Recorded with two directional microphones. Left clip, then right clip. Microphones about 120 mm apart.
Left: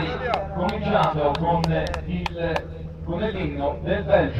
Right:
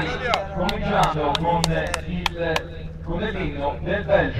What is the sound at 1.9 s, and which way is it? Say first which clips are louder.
Speech: right 3 dB; 25° left (ahead or behind).